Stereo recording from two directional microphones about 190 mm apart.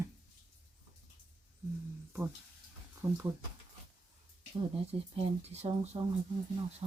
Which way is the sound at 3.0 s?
15° right (ahead or behind).